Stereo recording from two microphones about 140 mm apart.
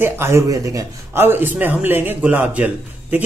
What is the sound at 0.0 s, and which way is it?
A man's voice, 20° right (ahead or behind).